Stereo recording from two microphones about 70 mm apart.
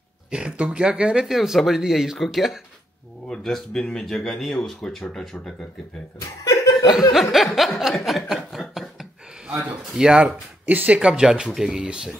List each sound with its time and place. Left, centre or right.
0.3 s speech: centre
6.1 s chuckle: left
6.9 s speech: centre
8.0 s a sound: centre
9.9 s speech: centre
10.7 s speech: centre